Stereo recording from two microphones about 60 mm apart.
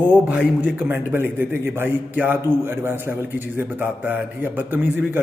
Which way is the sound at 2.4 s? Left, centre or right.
Right.